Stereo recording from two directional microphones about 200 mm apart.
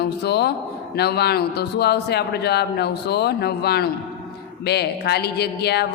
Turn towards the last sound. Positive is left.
turn(degrees=55)  # may be behind; listen again after turning